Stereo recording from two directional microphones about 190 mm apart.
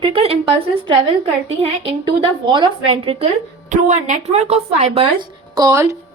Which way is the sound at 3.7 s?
40° right (ahead or behind).